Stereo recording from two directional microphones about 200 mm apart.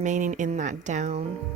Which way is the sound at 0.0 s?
40° right (ahead or behind).